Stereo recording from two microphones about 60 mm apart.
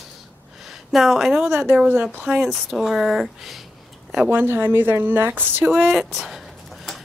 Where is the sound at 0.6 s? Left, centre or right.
Centre.